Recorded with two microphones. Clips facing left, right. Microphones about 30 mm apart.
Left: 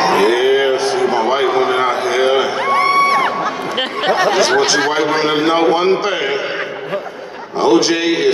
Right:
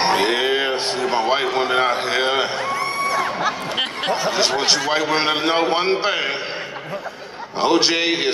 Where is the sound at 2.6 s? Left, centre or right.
Left.